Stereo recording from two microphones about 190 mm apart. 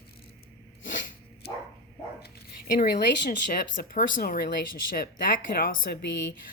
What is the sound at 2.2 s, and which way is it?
Speech, 50° left (ahead or behind).